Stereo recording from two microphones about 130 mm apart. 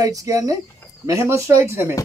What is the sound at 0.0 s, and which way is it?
Speech, 25° right (ahead or behind).